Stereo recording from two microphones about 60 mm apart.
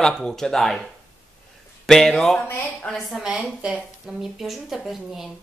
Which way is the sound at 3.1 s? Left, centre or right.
Centre.